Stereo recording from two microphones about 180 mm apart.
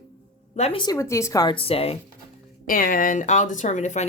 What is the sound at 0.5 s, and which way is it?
Speech, 35° left (ahead or behind).